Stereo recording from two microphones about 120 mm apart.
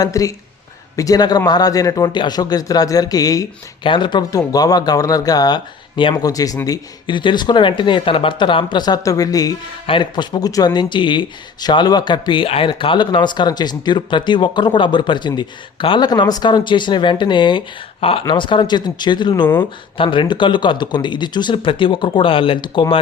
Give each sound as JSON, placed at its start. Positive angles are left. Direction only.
{"t": 0.0, "sound": "speech", "side_deg": 30}
{"t": 3.8, "sound": "speech", "side_deg": 40}
{"t": 6.2, "sound": "speech", "side_deg": 30}
{"t": 6.7, "sound": "speech", "side_deg": 40}
{"t": 9.8, "sound": "speech", "side_deg": 45}